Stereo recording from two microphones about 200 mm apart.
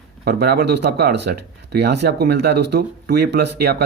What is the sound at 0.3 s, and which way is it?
Speech, 55° right (ahead or behind).